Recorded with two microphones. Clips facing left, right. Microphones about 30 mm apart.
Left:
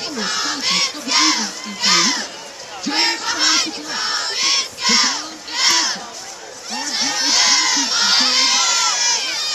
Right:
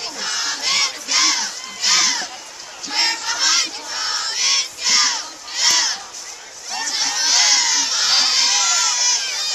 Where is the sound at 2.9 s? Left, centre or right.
Centre.